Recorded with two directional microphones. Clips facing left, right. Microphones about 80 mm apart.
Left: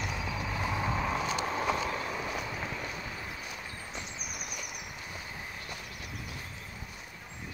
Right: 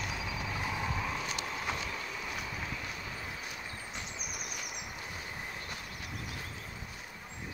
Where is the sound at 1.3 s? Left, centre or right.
Left.